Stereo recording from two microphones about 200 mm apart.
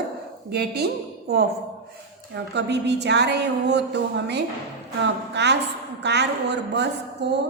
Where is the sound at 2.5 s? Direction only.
60° right (ahead or behind).